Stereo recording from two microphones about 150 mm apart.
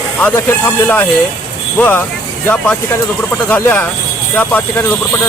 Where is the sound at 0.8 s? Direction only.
15° left (ahead or behind).